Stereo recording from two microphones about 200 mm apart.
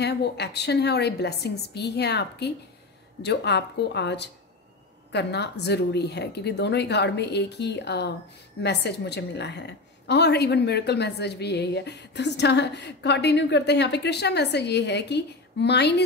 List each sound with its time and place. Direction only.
0.0 s a woman's voice: 55° left (ahead or behind)